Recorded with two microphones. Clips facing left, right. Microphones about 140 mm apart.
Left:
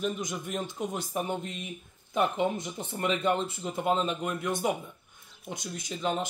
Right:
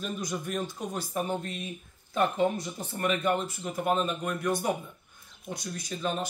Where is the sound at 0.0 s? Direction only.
20° left (ahead or behind).